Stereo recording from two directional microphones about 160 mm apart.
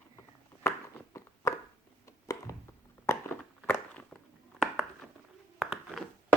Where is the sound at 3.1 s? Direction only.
15° left (ahead or behind).